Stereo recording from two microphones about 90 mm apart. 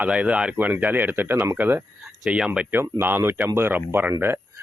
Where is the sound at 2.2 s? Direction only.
10° right (ahead or behind).